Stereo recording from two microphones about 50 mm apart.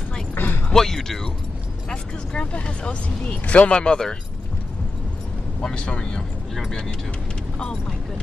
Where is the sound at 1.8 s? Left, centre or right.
Left.